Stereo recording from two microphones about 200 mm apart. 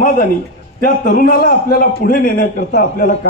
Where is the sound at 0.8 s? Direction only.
45° left (ahead or behind).